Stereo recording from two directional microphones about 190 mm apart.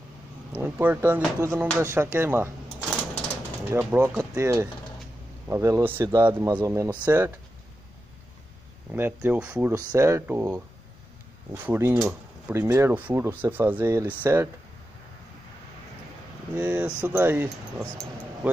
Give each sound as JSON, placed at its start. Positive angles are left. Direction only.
{"t": 0.5, "sound": "speech", "side_deg": -10}
{"t": 3.7, "sound": "speech", "side_deg": -15}
{"t": 8.9, "sound": "speech", "side_deg": -10}
{"t": 16.5, "sound": "speech", "side_deg": -10}